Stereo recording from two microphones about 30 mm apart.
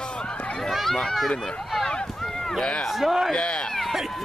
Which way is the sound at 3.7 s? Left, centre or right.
Centre.